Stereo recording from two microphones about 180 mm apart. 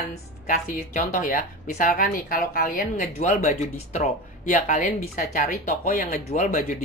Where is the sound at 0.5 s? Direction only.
45° left (ahead or behind).